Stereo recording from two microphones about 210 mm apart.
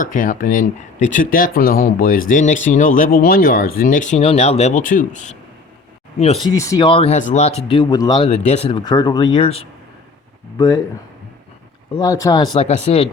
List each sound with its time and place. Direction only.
0.0 s speech: 40° left (ahead or behind)
6.5 s speech: 15° left (ahead or behind)
8.3 s speech: 30° left (ahead or behind)
11.9 s speech: 15° left (ahead or behind)
12.5 s speech: 30° left (ahead or behind)